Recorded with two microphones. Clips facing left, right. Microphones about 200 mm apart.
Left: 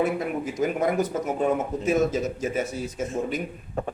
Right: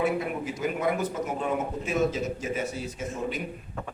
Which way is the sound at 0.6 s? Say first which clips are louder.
Left 5 dB; 45° left (ahead or behind).